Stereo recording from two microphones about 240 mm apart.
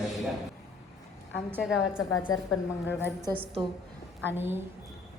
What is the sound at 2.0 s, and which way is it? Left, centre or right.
A woman's voice, left.